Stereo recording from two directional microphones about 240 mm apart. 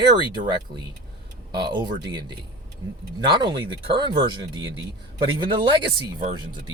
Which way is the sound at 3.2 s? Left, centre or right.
Centre.